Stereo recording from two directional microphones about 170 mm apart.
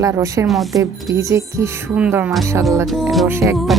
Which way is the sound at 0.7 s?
20° right (ahead or behind).